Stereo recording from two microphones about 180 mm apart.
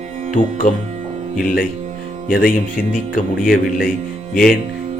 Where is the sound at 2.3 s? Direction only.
50° left (ahead or behind).